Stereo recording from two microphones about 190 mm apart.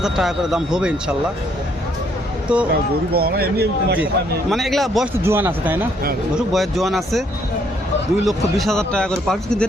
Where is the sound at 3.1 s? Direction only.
55° right (ahead or behind).